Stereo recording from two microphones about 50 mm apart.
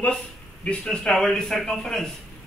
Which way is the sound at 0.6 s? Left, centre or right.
Left.